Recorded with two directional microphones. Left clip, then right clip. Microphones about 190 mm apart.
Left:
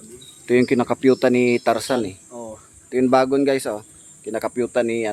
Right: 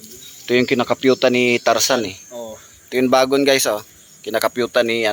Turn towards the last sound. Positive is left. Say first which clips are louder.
# right 4 dB
turn(degrees=-5)  # may be behind; listen again after turning